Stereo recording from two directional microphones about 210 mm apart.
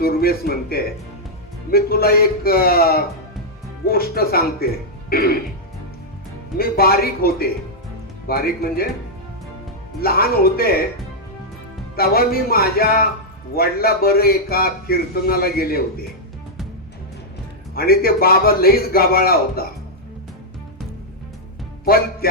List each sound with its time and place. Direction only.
0.0 s a man's voice: 45° left (ahead or behind)
6.6 s a man's voice: 45° left (ahead or behind)
10.0 s a man's voice: 45° left (ahead or behind)
11.9 s a man's voice: 45° left (ahead or behind)
17.7 s a man's voice: 45° left (ahead or behind)
21.8 s a man's voice: 45° left (ahead or behind)